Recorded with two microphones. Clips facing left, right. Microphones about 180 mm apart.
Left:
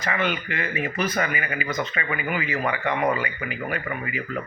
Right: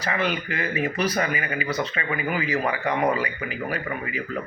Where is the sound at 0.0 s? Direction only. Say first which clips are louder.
Even; 35° right (ahead or behind).